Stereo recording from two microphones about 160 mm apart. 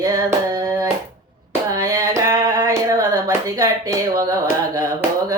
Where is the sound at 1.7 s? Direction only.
20° right (ahead or behind).